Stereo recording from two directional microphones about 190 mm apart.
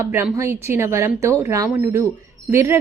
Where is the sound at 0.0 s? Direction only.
10° right (ahead or behind).